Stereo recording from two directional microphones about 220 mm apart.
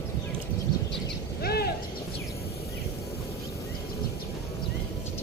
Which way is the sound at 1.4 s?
45° left (ahead or behind).